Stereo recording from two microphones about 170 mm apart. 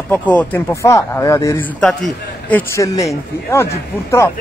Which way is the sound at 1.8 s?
5° left (ahead or behind).